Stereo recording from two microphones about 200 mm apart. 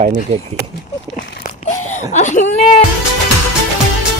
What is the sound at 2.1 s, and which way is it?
Speech, 35° left (ahead or behind).